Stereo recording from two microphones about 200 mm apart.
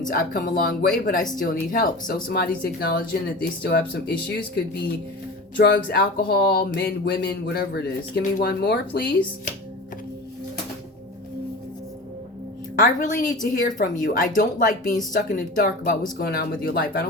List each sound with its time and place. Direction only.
0.0 s speech: 45° left (ahead or behind)
12.7 s a woman's voice: 40° left (ahead or behind)